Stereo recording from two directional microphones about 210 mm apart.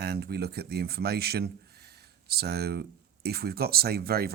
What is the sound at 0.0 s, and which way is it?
Speech, 50° right (ahead or behind).